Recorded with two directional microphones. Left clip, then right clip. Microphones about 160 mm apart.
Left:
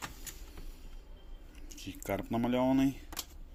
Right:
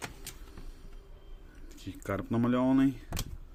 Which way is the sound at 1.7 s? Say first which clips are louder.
Right 1 dB; 40° right (ahead or behind).